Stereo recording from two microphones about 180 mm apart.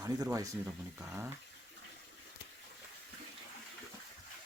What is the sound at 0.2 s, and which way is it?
Speech, 20° right (ahead or behind).